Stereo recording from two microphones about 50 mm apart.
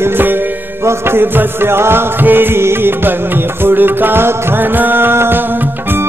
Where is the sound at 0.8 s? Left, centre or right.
Right.